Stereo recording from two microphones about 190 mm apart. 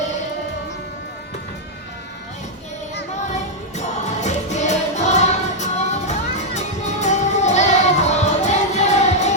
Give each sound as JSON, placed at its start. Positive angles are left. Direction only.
{"t": 3.2, "sound": "music", "side_deg": 35}